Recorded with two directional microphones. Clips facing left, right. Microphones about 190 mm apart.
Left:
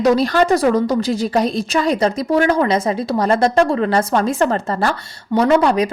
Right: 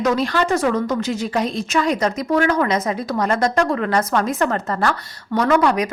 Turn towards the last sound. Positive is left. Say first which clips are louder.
# left 3 dB
turn(degrees=30)  # may be behind; listen again after turning